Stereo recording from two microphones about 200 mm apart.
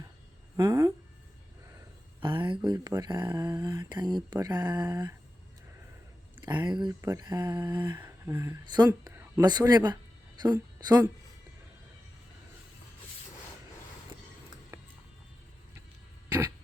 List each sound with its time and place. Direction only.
0.5 s speech: 15° right (ahead or behind)
2.2 s speech: 25° right (ahead or behind)
6.4 s speech: 20° right (ahead or behind)
7.8 s a woman's voice: 10° right (ahead or behind)
14.7 s music: 15° right (ahead or behind)